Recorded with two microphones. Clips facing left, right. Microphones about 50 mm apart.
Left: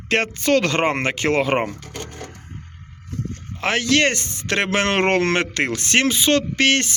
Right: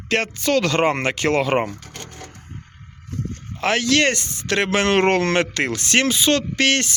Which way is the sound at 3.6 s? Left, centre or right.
Left.